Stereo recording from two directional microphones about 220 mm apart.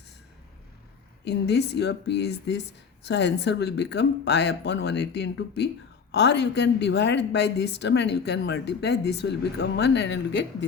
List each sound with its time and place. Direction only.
1.2 s speech: 50° left (ahead or behind)